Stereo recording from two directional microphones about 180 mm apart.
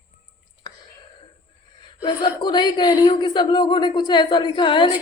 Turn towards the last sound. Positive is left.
turn(degrees=25)  # may be behind; listen again after turning